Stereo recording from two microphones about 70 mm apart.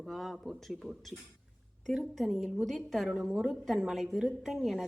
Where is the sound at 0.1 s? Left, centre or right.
Centre.